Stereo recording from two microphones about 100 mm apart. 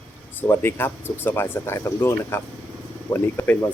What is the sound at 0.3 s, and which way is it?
Speech, 25° left (ahead or behind).